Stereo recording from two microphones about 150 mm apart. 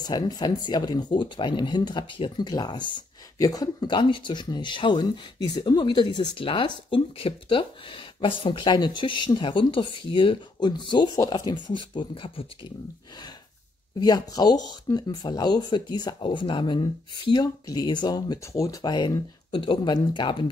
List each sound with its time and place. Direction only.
0.0 s speech: 25° left (ahead or behind)
13.9 s speech: 25° left (ahead or behind)